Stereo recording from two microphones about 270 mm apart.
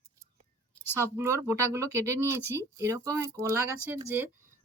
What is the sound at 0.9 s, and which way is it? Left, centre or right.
Speech, centre.